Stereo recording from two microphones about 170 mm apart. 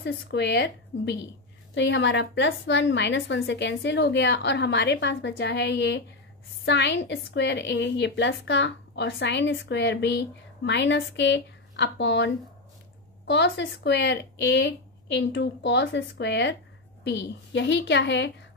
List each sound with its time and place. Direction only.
0.0 s a woman's voice: 85° left